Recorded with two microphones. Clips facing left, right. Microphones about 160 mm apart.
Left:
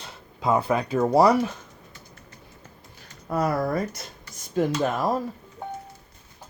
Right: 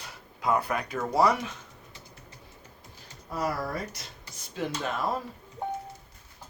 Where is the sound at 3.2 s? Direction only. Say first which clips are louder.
Left 7 dB; 55° left (ahead or behind); by 5.1 s 40° left (ahead or behind).